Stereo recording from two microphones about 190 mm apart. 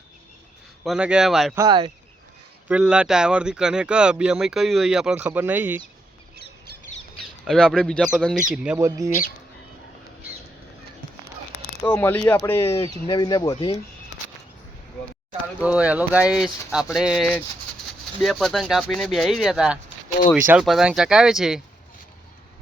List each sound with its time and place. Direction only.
0.9 s speech: 5° right (ahead or behind)
1.5 s speech: 25° right (ahead or behind)
2.6 s speech: 5° right (ahead or behind)
7.2 s speech: centre (ahead or behind); by 9.2 s 15° right (ahead or behind)
11.8 s speech: 15° left (ahead or behind)
13.1 s speech: 20° left (ahead or behind)
15.6 s speech: 5° right (ahead or behind)